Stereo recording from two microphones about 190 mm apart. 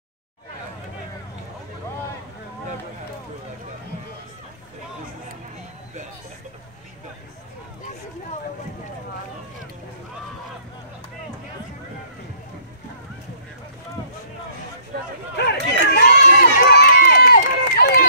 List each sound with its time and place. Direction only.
15.3 s run: 60° left (ahead or behind)